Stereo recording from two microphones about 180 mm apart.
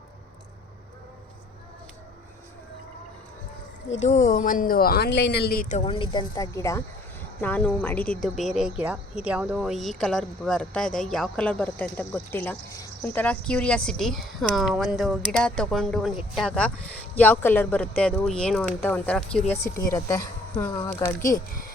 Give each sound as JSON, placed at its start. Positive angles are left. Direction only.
{"t": 4.0, "sound": "speech", "side_deg": 40}
{"t": 5.8, "sound": "a woman's voice", "side_deg": 30}
{"t": 19.6, "sound": "speech", "side_deg": 15}